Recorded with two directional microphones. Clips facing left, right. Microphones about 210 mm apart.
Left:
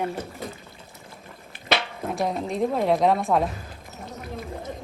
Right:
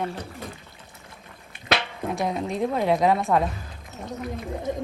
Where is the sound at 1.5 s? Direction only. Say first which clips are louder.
Even; centre (ahead or behind).